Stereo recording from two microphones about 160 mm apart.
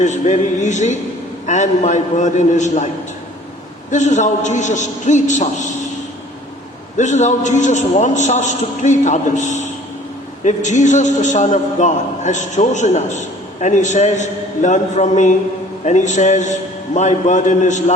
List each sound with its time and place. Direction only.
0.0 s a man's voice: 50° left (ahead or behind)
3.9 s a man's voice: 50° left (ahead or behind)
6.9 s a man's voice: 50° left (ahead or behind)